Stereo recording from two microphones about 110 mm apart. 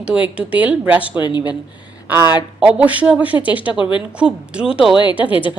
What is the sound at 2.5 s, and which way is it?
Speech, 10° right (ahead or behind).